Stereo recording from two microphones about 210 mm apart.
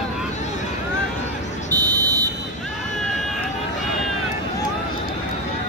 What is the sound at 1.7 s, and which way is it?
Buzzer, 15° right (ahead or behind).